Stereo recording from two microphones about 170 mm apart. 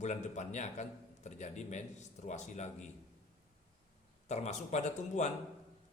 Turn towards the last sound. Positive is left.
turn(degrees=45)  # may be behind; listen again after turning